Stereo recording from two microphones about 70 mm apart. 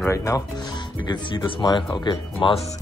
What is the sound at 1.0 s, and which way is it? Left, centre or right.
Speech, left.